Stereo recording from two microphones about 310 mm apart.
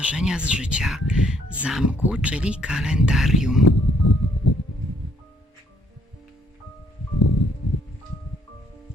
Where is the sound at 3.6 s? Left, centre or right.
Left.